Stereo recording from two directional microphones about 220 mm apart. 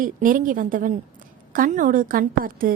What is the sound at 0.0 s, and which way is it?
A woman's voice, 40° right (ahead or behind).